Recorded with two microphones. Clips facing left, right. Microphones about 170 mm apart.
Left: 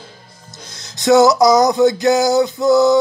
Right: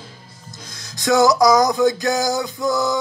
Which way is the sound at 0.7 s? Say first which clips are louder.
Left 5 dB; 25° left (ahead or behind).